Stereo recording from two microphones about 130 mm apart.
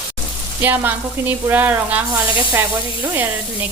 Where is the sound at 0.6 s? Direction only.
15° right (ahead or behind).